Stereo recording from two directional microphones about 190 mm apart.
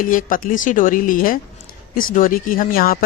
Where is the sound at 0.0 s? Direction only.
45° left (ahead or behind).